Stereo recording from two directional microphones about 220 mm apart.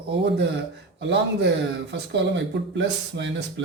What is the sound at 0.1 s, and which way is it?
Speech, 50° right (ahead or behind).